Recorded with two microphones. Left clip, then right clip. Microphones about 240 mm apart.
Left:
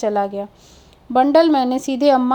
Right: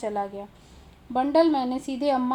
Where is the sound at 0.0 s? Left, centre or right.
Left.